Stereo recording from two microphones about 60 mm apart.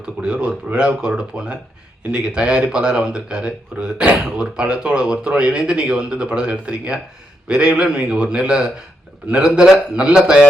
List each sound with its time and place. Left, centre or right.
0.0 s speech: centre